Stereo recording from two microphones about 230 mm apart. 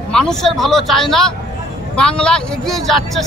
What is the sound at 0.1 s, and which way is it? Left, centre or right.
Speech, centre.